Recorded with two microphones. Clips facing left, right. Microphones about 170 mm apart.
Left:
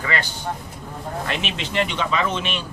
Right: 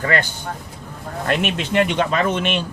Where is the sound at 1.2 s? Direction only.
50° right (ahead or behind).